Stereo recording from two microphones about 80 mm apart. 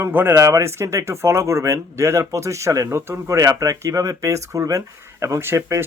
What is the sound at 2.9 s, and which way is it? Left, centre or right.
Speech, right.